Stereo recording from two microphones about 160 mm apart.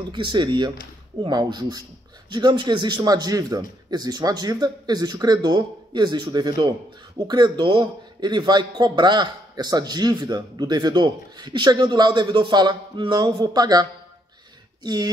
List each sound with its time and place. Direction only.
0.1 s a man's voice: 30° right (ahead or behind)